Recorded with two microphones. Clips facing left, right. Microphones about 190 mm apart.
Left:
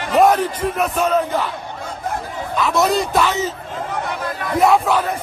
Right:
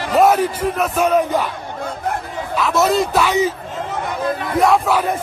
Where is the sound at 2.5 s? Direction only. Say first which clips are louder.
Right 1 dB; centre (ahead or behind).